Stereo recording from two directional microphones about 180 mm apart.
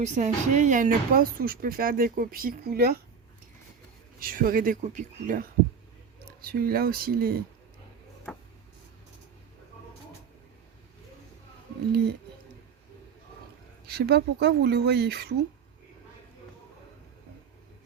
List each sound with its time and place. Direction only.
0.0 s speech: 40° right (ahead or behind); by 3.0 s 55° right (ahead or behind)
4.2 s speech: 50° right (ahead or behind)
13.8 s speech: 65° right (ahead or behind)